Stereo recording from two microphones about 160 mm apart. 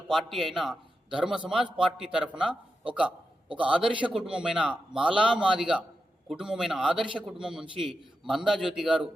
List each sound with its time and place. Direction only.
0.1 s a man's voice: centre (ahead or behind)